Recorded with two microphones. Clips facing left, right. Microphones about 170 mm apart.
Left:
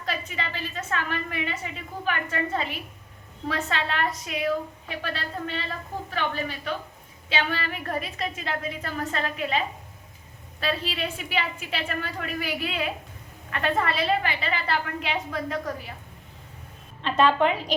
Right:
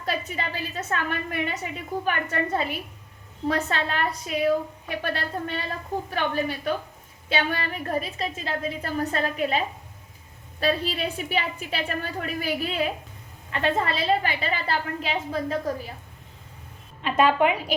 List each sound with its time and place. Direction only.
0.0 s a woman's voice: 40° right (ahead or behind)
5.0 s a woman's voice: 45° right (ahead or behind)
13.5 s a woman's voice: 30° right (ahead or behind)
17.0 s a woman's voice: 10° right (ahead or behind)